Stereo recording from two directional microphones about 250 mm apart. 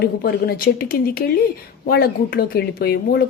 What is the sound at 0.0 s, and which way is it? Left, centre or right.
Speech, left.